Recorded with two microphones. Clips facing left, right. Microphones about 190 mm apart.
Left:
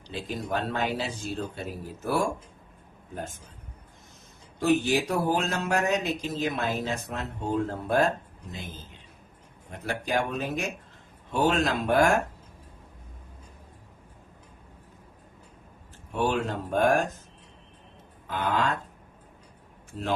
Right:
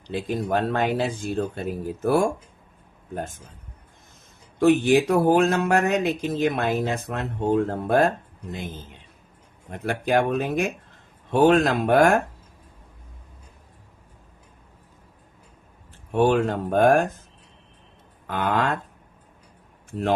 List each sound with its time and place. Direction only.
0.1 s speech: 55° right (ahead or behind)
4.6 s speech: 60° right (ahead or behind)
9.8 s speech: 55° right (ahead or behind)
16.1 s speech: 60° right (ahead or behind)
18.3 s speech: 55° right (ahead or behind)